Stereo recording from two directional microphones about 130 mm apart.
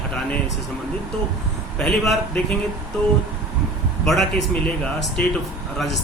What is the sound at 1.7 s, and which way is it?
Speech, 5° left (ahead or behind).